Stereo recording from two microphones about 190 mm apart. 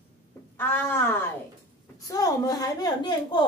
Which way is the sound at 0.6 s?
10° left (ahead or behind).